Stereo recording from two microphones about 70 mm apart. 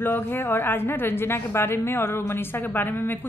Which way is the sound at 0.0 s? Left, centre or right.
Left.